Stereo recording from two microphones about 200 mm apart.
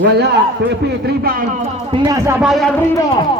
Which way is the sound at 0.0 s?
55° right (ahead or behind).